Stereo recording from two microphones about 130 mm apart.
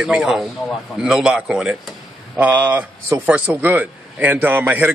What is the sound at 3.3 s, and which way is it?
A man's voice, 10° right (ahead or behind).